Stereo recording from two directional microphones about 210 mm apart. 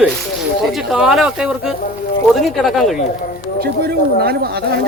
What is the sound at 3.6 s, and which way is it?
Speech, 45° right (ahead or behind).